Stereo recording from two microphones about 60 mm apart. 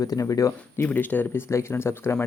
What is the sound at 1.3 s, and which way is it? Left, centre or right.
Speech, left.